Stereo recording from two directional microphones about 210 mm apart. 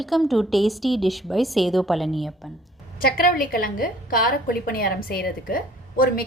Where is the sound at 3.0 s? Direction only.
40° left (ahead or behind).